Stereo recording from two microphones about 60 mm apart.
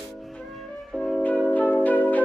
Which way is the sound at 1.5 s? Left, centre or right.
Left.